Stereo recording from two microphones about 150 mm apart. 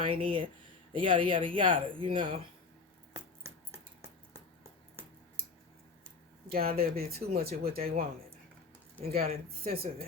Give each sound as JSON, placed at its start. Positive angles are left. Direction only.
{"t": 0.0, "sound": "speech", "side_deg": -35}
{"t": 6.5, "sound": "speech", "side_deg": -85}
{"t": 9.0, "sound": "speech", "side_deg": -85}